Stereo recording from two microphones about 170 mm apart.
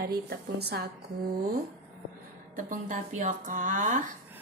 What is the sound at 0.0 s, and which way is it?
Speech, 70° right (ahead or behind).